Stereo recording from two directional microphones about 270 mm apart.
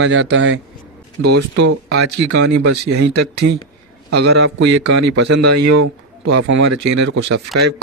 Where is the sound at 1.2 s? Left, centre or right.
Right.